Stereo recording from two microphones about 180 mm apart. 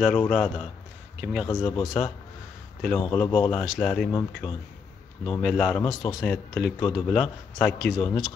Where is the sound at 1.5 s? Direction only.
15° left (ahead or behind).